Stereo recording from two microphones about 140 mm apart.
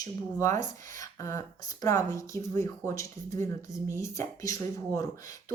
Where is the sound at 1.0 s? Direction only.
20° left (ahead or behind).